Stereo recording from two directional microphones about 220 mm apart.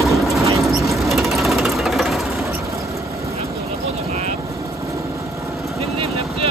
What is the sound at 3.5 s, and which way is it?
Vehicle, 25° right (ahead or behind).